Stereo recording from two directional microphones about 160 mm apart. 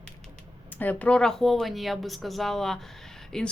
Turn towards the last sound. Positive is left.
turn(degrees=5)  # may be behind; listen again after turning